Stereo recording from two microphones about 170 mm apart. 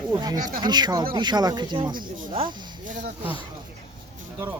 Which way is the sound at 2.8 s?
50° right (ahead or behind).